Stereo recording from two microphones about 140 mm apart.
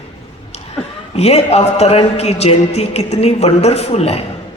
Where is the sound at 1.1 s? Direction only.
50° left (ahead or behind).